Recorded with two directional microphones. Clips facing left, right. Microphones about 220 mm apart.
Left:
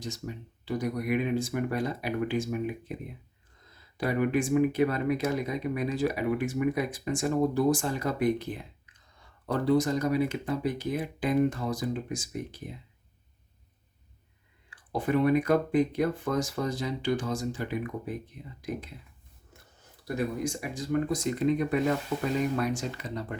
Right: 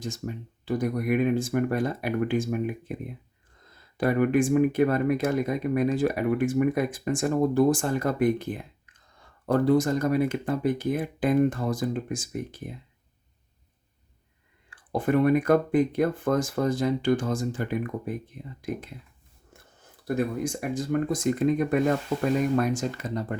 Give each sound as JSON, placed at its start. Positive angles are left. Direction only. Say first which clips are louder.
{"t": 0.0, "sound": "speech", "louder": "right 4 dB", "side_deg": -50}
{"t": 14.7, "sound": "speech", "louder": "right 3 dB", "side_deg": -55}
{"t": 20.1, "sound": "speech", "louder": "right 2 dB", "side_deg": -55}